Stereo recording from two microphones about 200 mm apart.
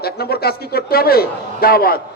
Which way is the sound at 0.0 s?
50° left (ahead or behind).